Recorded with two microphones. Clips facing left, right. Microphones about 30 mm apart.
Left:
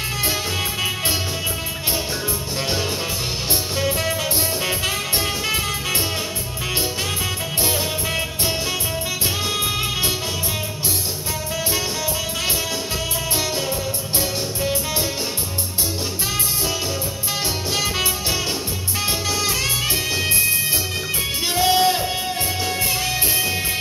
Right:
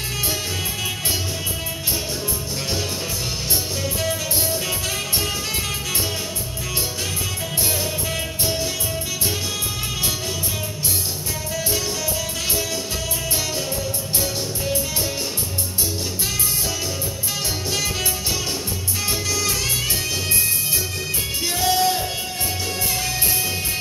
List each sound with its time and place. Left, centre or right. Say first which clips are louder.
4.6 s music: left 3 dB; left
14.2 s music: left 2 dB; left
17.7 s music: left 3 dB; left
19.4 s music: left 2 dB; left
21.5 s music: left 3 dB; left